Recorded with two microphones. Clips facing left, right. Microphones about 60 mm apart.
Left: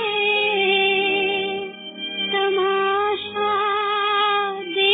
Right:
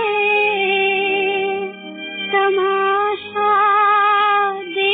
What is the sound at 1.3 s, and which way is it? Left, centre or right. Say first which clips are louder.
Music: right 5 dB; right.